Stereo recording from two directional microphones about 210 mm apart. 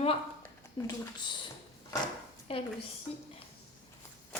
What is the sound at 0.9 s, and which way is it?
Speech, 20° left (ahead or behind).